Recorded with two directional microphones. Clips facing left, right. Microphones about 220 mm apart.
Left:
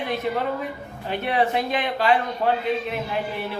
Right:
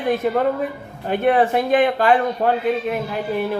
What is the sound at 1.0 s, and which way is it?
A man's voice, 50° right (ahead or behind).